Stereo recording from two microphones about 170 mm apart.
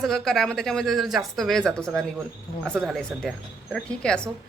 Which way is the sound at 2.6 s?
10° right (ahead or behind).